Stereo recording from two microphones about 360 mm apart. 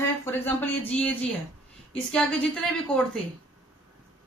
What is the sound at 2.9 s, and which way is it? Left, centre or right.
Speech, centre.